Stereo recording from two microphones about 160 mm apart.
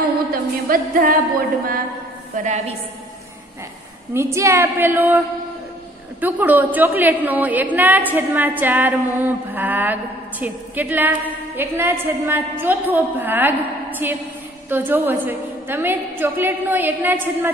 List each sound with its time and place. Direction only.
0.3 s music: 65° right (ahead or behind)
2.3 s a woman's voice: 50° right (ahead or behind)
4.1 s a woman's voice: 15° right (ahead or behind)
6.2 s a woman's voice: 10° right (ahead or behind)